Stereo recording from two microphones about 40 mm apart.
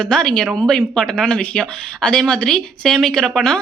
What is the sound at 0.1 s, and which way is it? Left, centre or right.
Speech, left.